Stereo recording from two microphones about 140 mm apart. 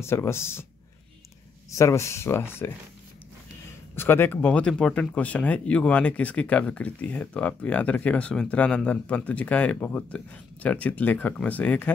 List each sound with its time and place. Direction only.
0.0 s speech: 20° left (ahead or behind)
1.7 s speech: 20° left (ahead or behind)
3.9 s speech: 15° left (ahead or behind)